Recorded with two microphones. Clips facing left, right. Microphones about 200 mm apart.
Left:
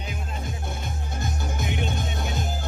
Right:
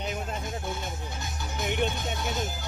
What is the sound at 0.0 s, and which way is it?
Music, 45° right (ahead or behind).